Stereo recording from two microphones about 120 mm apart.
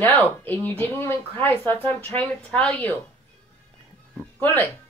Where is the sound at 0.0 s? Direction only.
15° left (ahead or behind).